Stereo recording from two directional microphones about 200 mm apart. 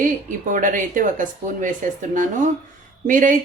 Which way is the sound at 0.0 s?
40° right (ahead or behind).